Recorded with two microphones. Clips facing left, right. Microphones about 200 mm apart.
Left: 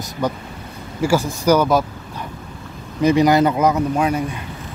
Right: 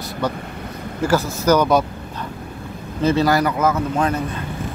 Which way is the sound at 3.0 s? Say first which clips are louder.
Left 3 dB; 15° left (ahead or behind).